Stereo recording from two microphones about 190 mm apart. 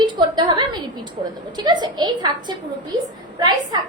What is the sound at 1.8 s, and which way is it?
A woman's voice, 25° right (ahead or behind).